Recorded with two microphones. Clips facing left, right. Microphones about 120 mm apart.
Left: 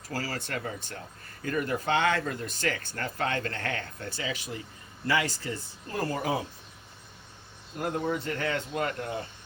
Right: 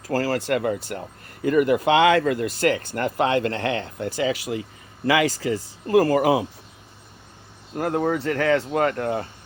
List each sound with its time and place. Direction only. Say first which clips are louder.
0.2 s speech: right 11 dB; 90° right
7.8 s speech: right 7 dB; 70° right (ahead or behind); by 9.2 s 55° right (ahead or behind)